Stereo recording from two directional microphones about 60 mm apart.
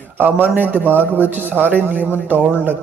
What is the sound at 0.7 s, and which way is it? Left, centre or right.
A man's voice, right.